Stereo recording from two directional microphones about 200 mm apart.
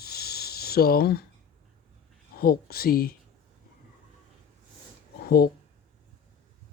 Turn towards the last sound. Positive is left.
turn(degrees=50)  # may be behind; listen again after turning